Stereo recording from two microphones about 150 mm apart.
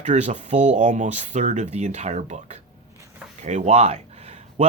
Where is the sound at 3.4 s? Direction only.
50° right (ahead or behind).